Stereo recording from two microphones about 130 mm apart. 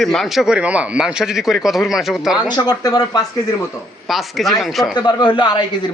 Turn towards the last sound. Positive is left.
turn(degrees=35)  # may be behind; listen again after turning